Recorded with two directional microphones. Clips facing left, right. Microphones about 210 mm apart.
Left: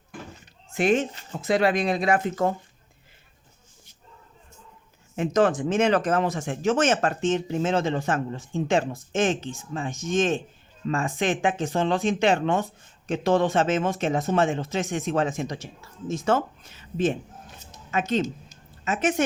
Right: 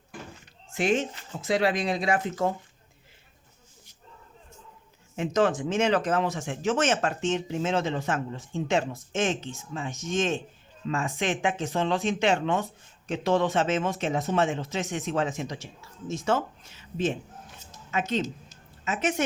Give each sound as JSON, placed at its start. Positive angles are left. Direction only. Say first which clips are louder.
{"t": 0.7, "sound": "speech", "louder": "left 3 dB", "side_deg": 55}
{"t": 5.1, "sound": "speech", "louder": "left 3 dB", "side_deg": 50}
{"t": 18.9, "sound": "speech", "louder": "left 3 dB", "side_deg": 50}